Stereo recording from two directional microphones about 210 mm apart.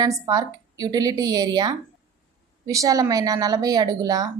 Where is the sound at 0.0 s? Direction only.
15° right (ahead or behind).